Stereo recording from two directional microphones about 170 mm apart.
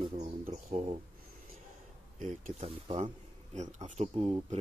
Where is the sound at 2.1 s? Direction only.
45° right (ahead or behind).